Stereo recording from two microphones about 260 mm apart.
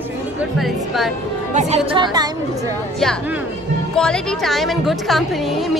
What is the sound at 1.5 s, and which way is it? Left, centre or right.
Speech, right.